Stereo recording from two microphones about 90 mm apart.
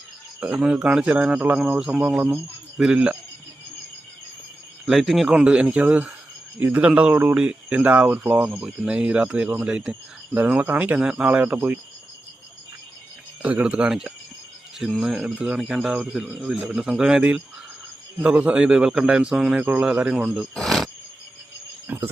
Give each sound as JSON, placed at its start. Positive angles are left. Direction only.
{"t": 0.3, "sound": "a man's voice", "side_deg": -15}
{"t": 4.9, "sound": "a man's voice", "side_deg": 0}
{"t": 8.6, "sound": "a man's voice", "side_deg": -5}
{"t": 10.3, "sound": "a man's voice", "side_deg": -20}
{"t": 13.4, "sound": "a man's voice", "side_deg": -15}
{"t": 20.5, "sound": "wild animals", "side_deg": 5}
{"t": 21.8, "sound": "cricket", "side_deg": -25}